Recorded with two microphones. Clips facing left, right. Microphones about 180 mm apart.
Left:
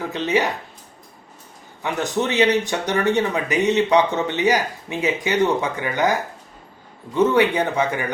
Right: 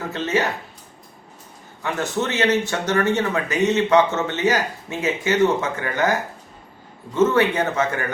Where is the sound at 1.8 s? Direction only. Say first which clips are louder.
Left 1 dB; 15° left (ahead or behind).